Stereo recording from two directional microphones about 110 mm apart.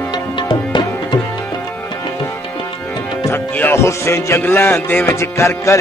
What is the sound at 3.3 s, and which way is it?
Music, 20° left (ahead or behind).